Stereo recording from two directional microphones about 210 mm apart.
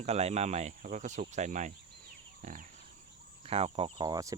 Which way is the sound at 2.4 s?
35° right (ahead or behind).